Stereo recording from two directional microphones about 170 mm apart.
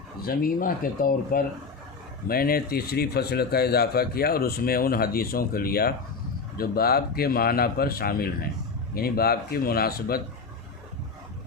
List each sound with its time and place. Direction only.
0.2 s a man's voice: 60° left (ahead or behind)